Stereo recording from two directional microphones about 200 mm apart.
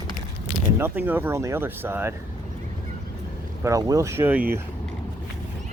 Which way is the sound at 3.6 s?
15° right (ahead or behind).